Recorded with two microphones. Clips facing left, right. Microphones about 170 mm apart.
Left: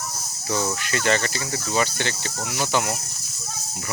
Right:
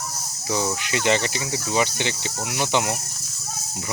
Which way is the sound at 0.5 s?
15° right (ahead or behind).